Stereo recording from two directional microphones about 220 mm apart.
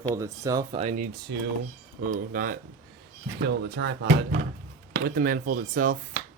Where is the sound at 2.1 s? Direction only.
40° right (ahead or behind).